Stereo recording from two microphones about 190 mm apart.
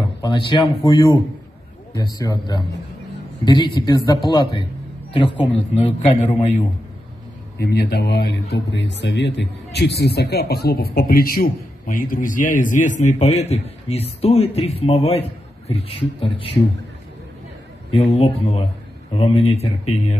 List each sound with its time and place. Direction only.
0.2 s a man's voice: 25° left (ahead or behind)
5.8 s a man's voice: 30° left (ahead or behind)
7.5 s a man's voice: 55° left (ahead or behind); by 16.5 s 30° left (ahead or behind)
17.9 s speech: 35° left (ahead or behind)